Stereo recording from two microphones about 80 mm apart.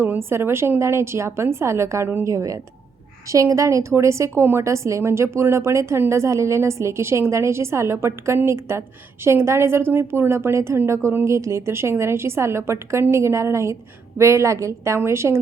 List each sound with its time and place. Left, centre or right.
0.0 s a woman's voice: right